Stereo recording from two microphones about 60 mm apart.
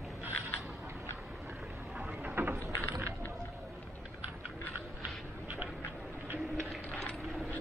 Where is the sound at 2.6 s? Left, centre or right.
Right.